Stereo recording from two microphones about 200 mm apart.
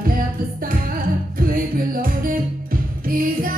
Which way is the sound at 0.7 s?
45° right (ahead or behind).